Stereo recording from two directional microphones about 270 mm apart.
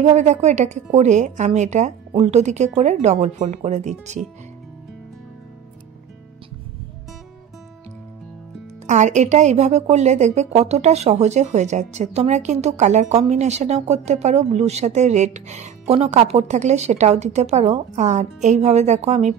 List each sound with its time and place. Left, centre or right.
0.0 s a woman's voice: right
8.8 s a woman's voice: right